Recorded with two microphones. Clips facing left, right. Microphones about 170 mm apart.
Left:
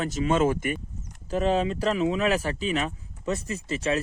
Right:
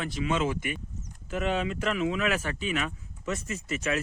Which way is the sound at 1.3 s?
35° left (ahead or behind).